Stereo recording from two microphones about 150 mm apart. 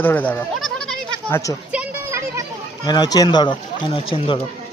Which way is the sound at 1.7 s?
10° right (ahead or behind).